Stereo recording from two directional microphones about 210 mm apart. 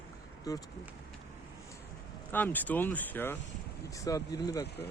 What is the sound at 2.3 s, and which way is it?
Speech, 10° left (ahead or behind).